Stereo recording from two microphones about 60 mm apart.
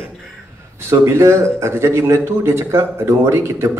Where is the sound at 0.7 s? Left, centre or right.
Right.